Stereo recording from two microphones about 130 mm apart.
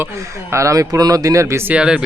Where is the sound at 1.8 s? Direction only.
5° right (ahead or behind).